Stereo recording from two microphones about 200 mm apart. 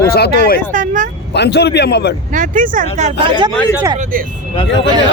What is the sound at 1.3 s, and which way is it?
Speech, 55° left (ahead or behind).